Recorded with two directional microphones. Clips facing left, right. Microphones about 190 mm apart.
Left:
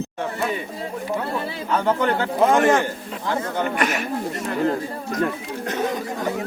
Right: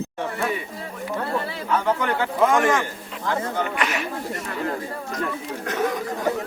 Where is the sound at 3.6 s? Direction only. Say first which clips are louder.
Left 2 dB; 45° left (ahead or behind).